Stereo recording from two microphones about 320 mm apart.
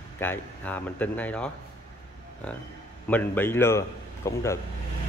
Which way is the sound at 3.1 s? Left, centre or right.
Centre.